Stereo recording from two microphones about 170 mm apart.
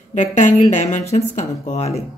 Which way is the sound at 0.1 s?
45° left (ahead or behind).